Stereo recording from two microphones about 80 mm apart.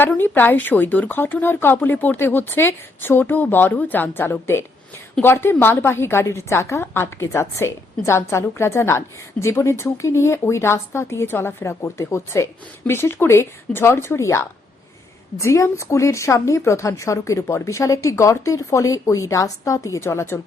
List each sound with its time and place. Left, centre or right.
0.2 s a woman's voice: left